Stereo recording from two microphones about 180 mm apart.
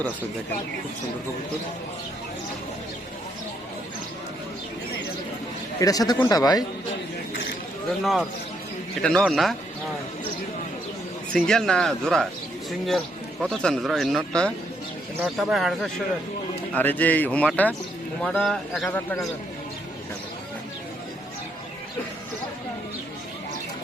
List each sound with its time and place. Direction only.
5.8 s speech: 20° left (ahead or behind)
8.0 s speech: centre (ahead or behind)
11.3 s speech: 5° left (ahead or behind)
13.5 s speech: 5° left (ahead or behind)